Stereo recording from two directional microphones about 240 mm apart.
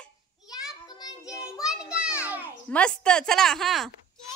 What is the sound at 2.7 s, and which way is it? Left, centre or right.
A woman's voice, centre.